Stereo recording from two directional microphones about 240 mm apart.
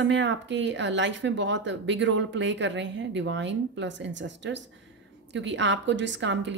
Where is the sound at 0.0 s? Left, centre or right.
Right.